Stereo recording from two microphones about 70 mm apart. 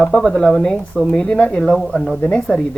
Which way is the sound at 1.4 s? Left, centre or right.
Centre.